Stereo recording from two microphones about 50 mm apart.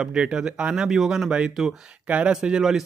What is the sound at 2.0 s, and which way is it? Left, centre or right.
Speech, right.